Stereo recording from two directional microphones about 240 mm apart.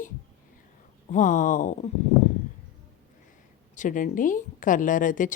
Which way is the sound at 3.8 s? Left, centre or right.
Left.